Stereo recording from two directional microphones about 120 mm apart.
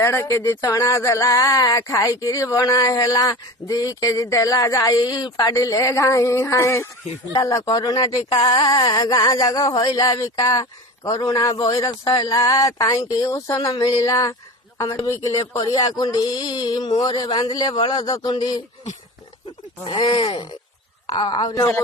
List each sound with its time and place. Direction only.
0.0 s speech: 25° left (ahead or behind); by 18.6 s 40° left (ahead or behind)
19.8 s speech: 50° left (ahead or behind)
21.2 s speech: 35° left (ahead or behind)